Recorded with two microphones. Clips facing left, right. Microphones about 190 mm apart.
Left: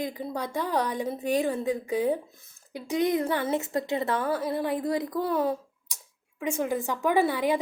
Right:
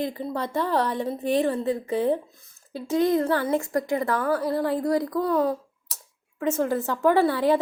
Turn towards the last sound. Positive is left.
turn(degrees=15)  # may be behind; listen again after turning